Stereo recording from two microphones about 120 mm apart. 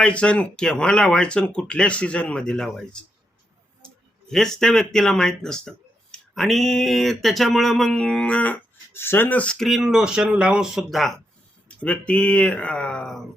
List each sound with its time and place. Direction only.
0.0 s speech: 10° left (ahead or behind)
11.7 s speech: 10° left (ahead or behind)